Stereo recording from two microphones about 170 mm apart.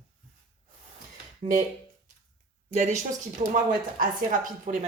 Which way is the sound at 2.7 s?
45° right (ahead or behind).